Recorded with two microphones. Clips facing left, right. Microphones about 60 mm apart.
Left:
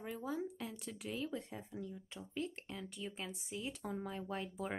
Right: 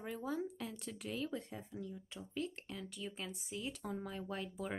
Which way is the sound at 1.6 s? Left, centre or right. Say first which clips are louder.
Even; centre.